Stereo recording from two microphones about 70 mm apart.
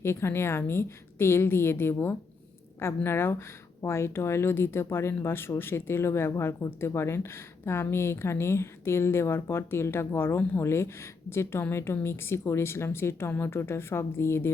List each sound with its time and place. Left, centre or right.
0.0 s a woman's voice: left